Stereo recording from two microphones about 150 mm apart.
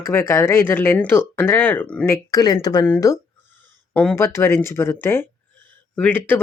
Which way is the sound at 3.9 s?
10° left (ahead or behind).